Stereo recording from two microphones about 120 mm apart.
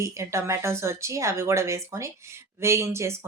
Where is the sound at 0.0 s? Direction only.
25° right (ahead or behind).